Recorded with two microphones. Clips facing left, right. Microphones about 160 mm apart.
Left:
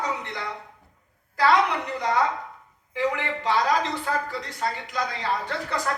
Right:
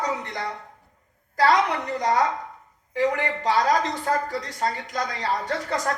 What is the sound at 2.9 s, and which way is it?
A woman's voice, 40° right (ahead or behind).